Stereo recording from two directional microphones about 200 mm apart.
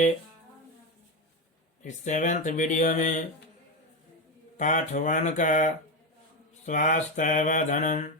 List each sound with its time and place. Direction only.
1.8 s speech: 40° left (ahead or behind)
4.5 s speech: 40° left (ahead or behind)